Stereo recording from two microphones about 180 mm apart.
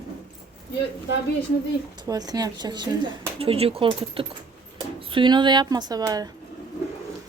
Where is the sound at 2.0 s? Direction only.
20° right (ahead or behind).